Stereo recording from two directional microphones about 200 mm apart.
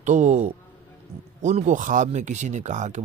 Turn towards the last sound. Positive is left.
turn(degrees=-35)  # may be behind; listen again after turning